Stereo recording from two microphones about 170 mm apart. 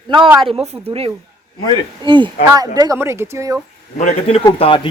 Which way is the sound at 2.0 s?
30° right (ahead or behind).